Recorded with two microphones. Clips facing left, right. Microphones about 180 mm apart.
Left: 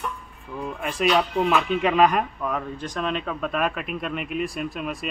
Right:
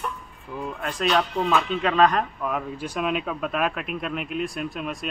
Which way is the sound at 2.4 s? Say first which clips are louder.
Even; 5° right (ahead or behind).